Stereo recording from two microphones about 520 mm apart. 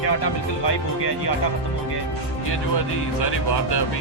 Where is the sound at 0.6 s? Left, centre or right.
Left.